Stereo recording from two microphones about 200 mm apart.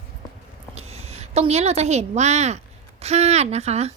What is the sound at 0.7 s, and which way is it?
A woman's voice, 30° right (ahead or behind).